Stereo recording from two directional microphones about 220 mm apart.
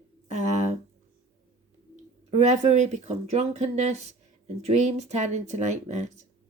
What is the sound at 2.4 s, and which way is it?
Speech, 30° right (ahead or behind).